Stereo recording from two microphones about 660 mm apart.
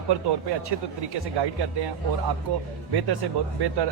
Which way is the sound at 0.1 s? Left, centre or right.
Right.